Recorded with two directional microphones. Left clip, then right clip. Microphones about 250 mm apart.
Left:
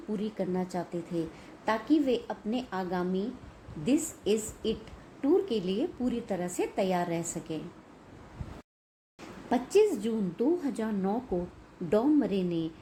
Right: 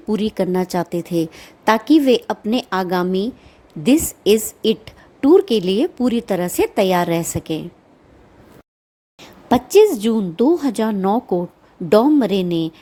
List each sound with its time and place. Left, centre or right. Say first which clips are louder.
0.1 s a woman's voice: right 14 dB; right
9.5 s a woman's voice: right 13 dB; right